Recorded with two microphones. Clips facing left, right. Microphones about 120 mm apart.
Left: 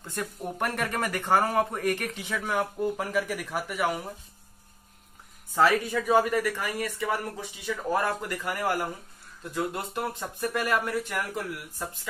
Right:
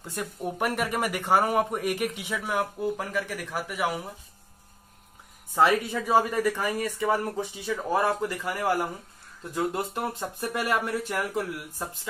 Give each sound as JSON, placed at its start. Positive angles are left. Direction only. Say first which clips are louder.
{"t": 0.0, "sound": "speech", "louder": "right 1 dB", "side_deg": -10}
{"t": 5.5, "sound": "speech", "louder": "right 1 dB", "side_deg": -20}